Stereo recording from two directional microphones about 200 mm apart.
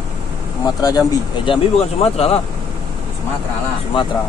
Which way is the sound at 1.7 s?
30° left (ahead or behind).